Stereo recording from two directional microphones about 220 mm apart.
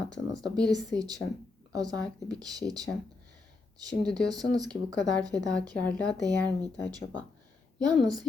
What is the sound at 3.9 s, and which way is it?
Speech, centre (ahead or behind).